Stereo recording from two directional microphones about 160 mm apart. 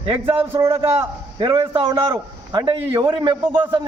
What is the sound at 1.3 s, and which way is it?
A man's voice, 25° right (ahead or behind).